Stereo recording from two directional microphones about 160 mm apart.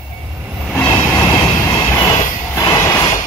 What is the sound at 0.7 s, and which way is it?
Vehicle, 15° left (ahead or behind).